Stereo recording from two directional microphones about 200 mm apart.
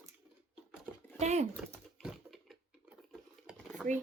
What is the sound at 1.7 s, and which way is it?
Typing, 5° right (ahead or behind).